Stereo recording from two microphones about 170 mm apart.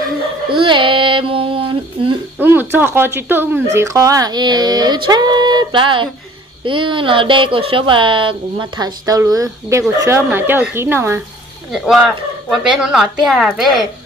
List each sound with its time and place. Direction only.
0.5 s child singing: 30° right (ahead or behind)
2.4 s a woman's voice: 10° right (ahead or behind)
11.7 s a woman's voice: centre (ahead or behind)